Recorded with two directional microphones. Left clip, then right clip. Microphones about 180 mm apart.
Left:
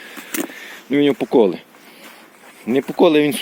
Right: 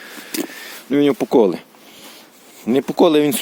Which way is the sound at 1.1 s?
25° right (ahead or behind).